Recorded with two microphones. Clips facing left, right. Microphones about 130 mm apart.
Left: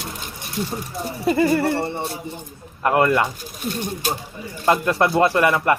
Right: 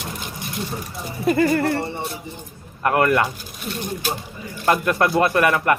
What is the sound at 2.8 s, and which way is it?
Speech, 20° left (ahead or behind).